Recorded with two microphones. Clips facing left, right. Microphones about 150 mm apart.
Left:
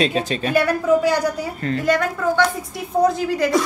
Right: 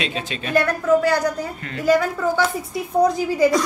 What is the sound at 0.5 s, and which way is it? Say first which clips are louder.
Speech: even; 10° left (ahead or behind).